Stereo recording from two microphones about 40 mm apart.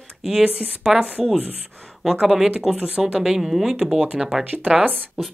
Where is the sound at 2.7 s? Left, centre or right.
Right.